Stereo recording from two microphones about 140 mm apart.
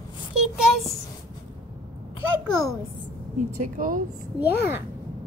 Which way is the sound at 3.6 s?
75° right (ahead or behind).